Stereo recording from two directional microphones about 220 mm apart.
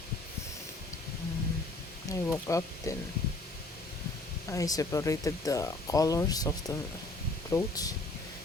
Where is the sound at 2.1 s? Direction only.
10° left (ahead or behind).